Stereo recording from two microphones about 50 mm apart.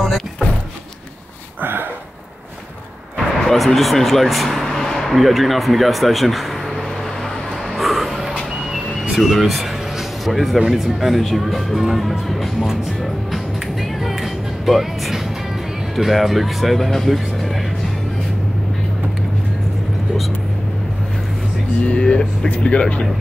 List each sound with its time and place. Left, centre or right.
1.6 s a sound: right
3.4 s speech: centre
7.7 s music: centre
9.1 s speech: centre
21.8 s speech: left